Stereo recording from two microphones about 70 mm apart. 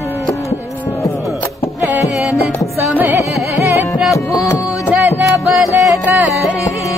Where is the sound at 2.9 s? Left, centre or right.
Right.